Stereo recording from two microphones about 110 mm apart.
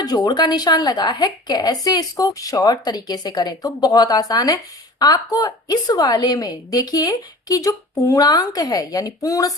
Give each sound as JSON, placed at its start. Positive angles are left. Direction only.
{"t": 0.0, "sound": "a woman's voice", "side_deg": 40}